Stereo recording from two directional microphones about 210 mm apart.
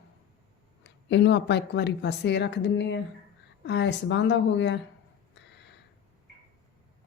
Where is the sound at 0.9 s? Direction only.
55° left (ahead or behind).